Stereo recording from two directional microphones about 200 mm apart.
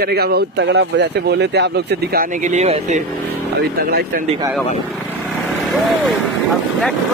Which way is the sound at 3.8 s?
50° right (ahead or behind).